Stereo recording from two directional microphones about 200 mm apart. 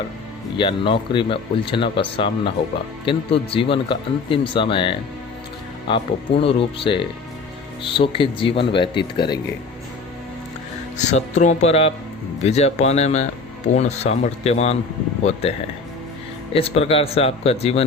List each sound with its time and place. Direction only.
0.5 s speech: 25° left (ahead or behind)
10.9 s speech: 35° left (ahead or behind)